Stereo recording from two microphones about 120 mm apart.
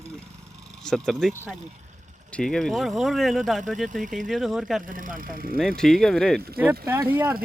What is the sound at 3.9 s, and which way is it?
Speech, 90° right.